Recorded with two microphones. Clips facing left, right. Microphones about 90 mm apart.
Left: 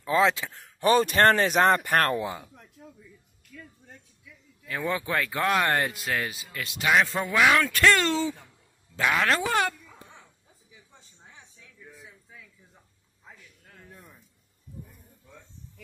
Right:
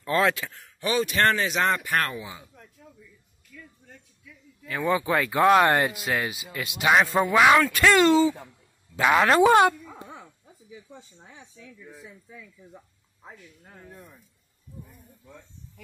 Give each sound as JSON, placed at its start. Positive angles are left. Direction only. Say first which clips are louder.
{"t": 0.0, "sound": "speech", "louder": "left 1 dB", "side_deg": 15}
{"t": 0.7, "sound": "speech", "louder": "left 4 dB", "side_deg": 45}
{"t": 4.6, "sound": "speech", "louder": "right 5 dB", "side_deg": -5}
{"t": 7.6, "sound": "speech", "louder": "right 3 dB", "side_deg": -5}
{"t": 8.9, "sound": "speech", "louder": "right 5 dB", "side_deg": -15}
{"t": 13.7, "sound": "speech", "louder": "right 4 dB", "side_deg": -30}